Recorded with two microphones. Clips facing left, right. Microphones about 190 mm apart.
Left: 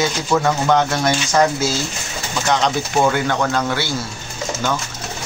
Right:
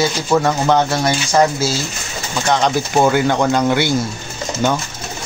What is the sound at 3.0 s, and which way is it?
Speech, 15° right (ahead or behind).